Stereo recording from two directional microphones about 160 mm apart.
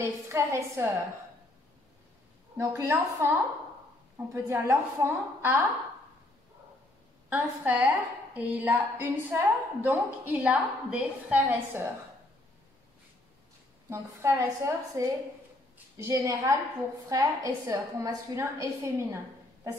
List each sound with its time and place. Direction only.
0.0 s a woman's voice: 20° right (ahead or behind)
2.5 s a woman's voice: 20° right (ahead or behind)
7.2 s a woman's voice: 10° right (ahead or behind)
13.8 s a woman's voice: 15° right (ahead or behind)